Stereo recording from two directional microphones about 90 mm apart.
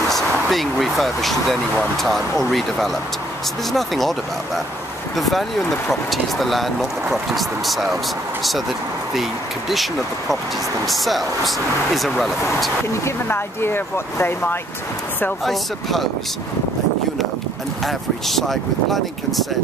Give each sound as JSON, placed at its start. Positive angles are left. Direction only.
{"t": 0.1, "sound": "speech", "side_deg": 0}
{"t": 5.1, "sound": "speech", "side_deg": 0}
{"t": 9.1, "sound": "speech", "side_deg": 0}
{"t": 13.0, "sound": "speech", "side_deg": 25}
{"t": 15.4, "sound": "speech", "side_deg": 0}
{"t": 17.8, "sound": "speech", "side_deg": 0}